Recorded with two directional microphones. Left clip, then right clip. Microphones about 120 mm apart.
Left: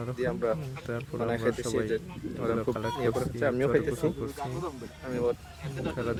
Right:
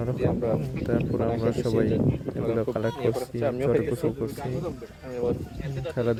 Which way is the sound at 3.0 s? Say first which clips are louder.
Right 2 dB; 25° left (ahead or behind).